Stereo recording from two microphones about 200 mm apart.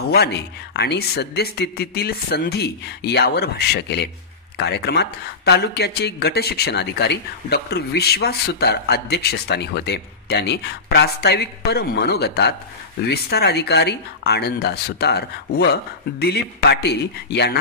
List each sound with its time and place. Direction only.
0.1 s speech: 55° left (ahead or behind)